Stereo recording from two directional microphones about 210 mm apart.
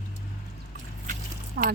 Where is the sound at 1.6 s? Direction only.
50° right (ahead or behind).